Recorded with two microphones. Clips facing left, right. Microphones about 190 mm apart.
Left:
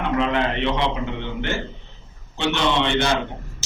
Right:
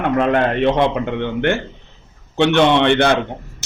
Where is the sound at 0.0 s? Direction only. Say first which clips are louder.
Right 5 dB; 55° right (ahead or behind).